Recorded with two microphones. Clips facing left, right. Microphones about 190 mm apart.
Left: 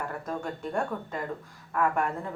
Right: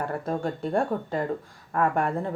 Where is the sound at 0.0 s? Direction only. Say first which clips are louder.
Right 5 dB; 35° right (ahead or behind).